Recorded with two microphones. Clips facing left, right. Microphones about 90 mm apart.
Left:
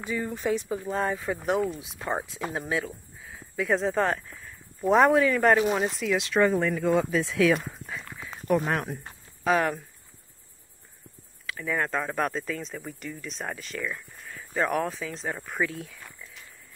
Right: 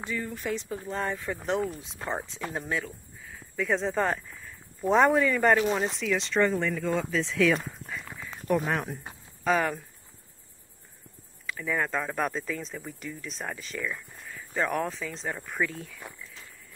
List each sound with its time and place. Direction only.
0.1 s speech: 20° left (ahead or behind); by 5.6 s centre (ahead or behind)
5.6 s speech: 15° left (ahead or behind)
11.4 s speech: centre (ahead or behind)